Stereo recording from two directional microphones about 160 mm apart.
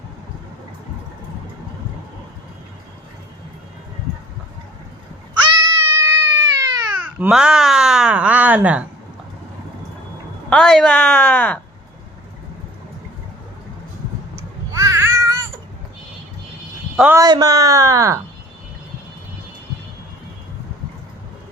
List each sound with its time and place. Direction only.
5.5 s cat: 15° right (ahead or behind)
7.0 s a sound: 10° right (ahead or behind)
10.5 s speech: 5° left (ahead or behind)
14.7 s babbling: 20° right (ahead or behind)
17.2 s speech: 25° right (ahead or behind)